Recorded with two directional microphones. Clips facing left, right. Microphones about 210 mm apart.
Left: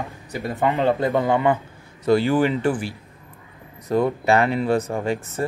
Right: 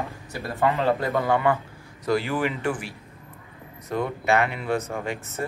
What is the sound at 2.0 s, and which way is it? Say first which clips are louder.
Speech: left 6 dB; 30° left (ahead or behind).